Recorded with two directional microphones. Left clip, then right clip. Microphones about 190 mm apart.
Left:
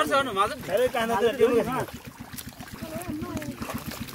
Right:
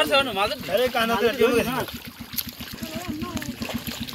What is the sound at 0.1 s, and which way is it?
Speech, 50° left (ahead or behind).